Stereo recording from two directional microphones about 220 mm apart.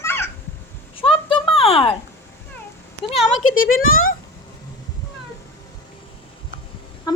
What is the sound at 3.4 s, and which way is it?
Speech, 70° left (ahead or behind).